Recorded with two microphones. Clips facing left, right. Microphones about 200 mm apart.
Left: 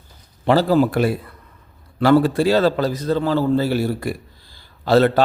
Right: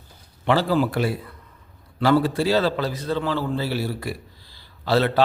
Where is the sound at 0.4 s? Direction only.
40° left (ahead or behind).